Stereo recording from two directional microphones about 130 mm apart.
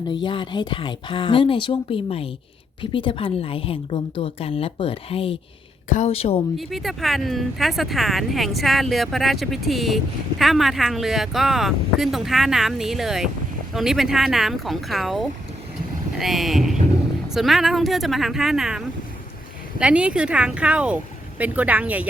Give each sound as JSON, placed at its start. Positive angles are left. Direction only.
{"t": 0.1, "sound": "a woman's voice", "side_deg": 40}
{"t": 6.6, "sound": "speech", "side_deg": 0}